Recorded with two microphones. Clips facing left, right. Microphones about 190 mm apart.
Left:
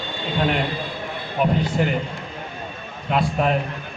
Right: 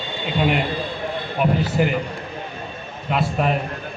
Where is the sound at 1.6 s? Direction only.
5° right (ahead or behind).